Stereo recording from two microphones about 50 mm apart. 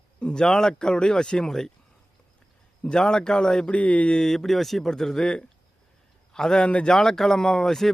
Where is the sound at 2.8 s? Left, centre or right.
Centre.